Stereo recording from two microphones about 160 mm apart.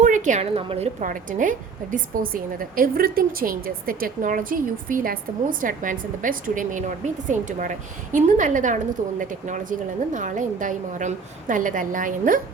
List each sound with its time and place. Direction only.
0.0 s a woman's voice: 50° right (ahead or behind)
1.0 s a woman's voice: 55° right (ahead or behind)